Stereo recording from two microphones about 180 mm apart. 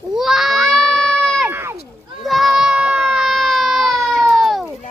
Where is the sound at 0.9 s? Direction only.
5° left (ahead or behind).